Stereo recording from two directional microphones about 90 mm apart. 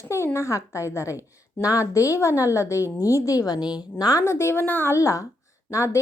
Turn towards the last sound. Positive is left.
turn(degrees=35)  # may be behind; listen again after turning